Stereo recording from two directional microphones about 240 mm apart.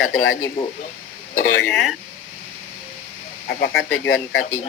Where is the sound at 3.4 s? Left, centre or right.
Left.